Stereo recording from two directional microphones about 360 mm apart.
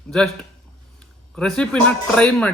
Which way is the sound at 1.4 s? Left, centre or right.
Centre.